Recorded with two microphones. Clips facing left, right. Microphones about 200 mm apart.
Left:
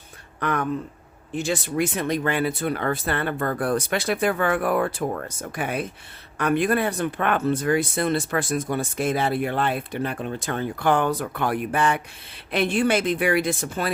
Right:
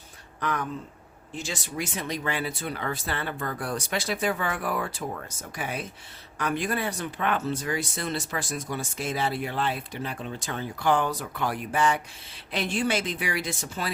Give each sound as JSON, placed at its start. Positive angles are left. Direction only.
{"t": 0.3, "sound": "speech", "side_deg": 60}